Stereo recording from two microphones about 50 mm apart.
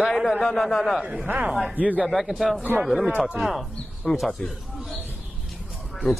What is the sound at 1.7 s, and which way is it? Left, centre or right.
Speech, right.